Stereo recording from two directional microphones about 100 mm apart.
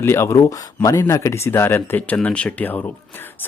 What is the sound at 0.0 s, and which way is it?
Speech, 25° left (ahead or behind).